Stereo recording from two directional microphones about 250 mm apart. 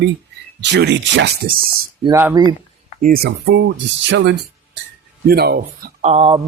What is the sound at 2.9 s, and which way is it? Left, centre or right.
Speech, right.